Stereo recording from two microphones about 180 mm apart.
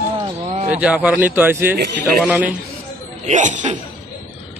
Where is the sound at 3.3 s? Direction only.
45° right (ahead or behind).